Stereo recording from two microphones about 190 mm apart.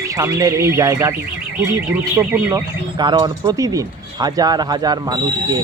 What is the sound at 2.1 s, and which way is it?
Speech, 15° right (ahead or behind).